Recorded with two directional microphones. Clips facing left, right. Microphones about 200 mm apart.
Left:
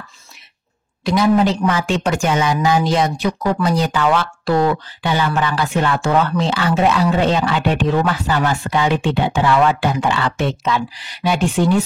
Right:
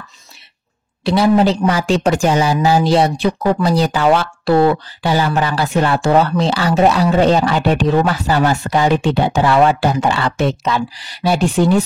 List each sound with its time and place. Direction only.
1.0 s speech: 30° right (ahead or behind)